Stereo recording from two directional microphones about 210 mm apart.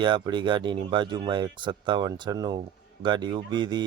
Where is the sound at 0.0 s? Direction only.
20° right (ahead or behind).